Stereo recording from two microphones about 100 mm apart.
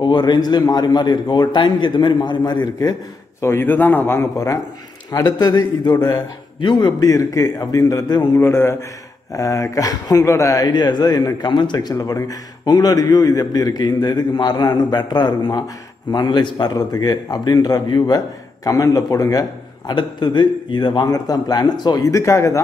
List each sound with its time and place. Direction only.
0.0 s a man's voice: 50° left (ahead or behind)
3.4 s a man's voice: 20° left (ahead or behind)
5.1 s a man's voice: 45° left (ahead or behind)
8.4 s a man's voice: 25° left (ahead or behind)
19.9 s a man's voice: 50° left (ahead or behind); by 22.6 s 30° left (ahead or behind)